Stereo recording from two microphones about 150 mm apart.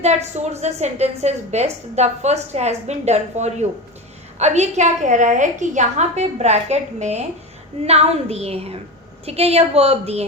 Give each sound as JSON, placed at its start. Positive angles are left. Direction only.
{"t": 0.0, "sound": "a woman's voice", "side_deg": -45}